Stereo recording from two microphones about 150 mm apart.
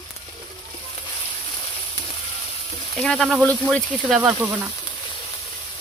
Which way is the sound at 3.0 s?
5° left (ahead or behind).